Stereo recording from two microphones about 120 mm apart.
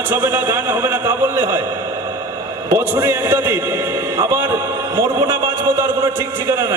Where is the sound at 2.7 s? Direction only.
20° right (ahead or behind).